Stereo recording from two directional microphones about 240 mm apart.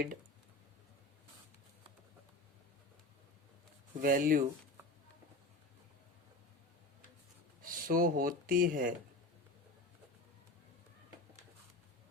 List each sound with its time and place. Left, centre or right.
4.0 s speech: right
7.6 s speech: right